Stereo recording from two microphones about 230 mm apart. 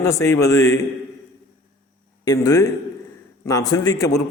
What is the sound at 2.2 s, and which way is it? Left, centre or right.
A man's voice, centre.